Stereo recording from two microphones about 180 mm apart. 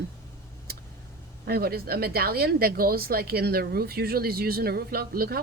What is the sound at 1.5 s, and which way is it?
Speech, 60° right (ahead or behind).